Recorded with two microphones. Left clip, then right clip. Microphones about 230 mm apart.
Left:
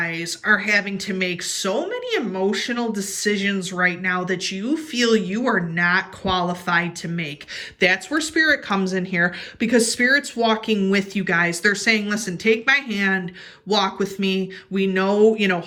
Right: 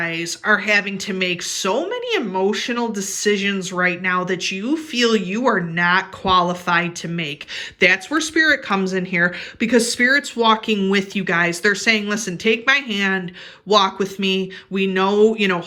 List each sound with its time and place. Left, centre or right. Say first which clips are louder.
0.0 s speech: right 2 dB; centre